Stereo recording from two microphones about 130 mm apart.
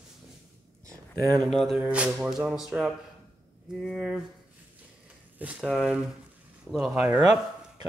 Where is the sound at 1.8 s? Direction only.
10° right (ahead or behind).